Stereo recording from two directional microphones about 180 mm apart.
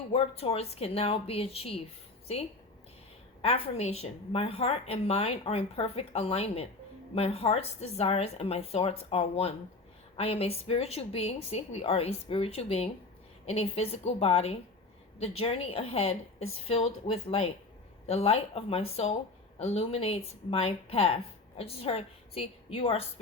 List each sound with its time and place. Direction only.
0.1 s a woman's voice: 35° left (ahead or behind)